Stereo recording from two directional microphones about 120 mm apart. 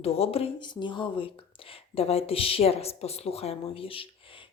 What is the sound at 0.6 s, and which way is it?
Speech, 40° left (ahead or behind).